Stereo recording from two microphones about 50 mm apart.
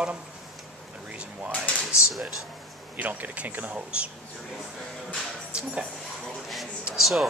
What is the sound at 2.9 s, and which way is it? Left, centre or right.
Speech, right.